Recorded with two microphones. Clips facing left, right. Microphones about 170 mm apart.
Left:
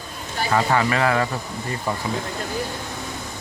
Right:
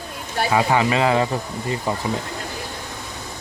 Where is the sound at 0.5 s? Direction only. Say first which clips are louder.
Right 1 dB; 15° right (ahead or behind).